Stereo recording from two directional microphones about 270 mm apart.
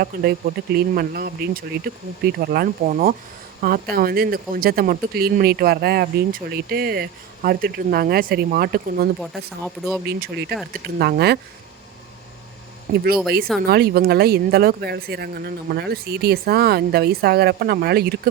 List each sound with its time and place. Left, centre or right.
0.0 s speech: right
9.2 s speech: centre
10.1 s speech: right
13.6 s speech: right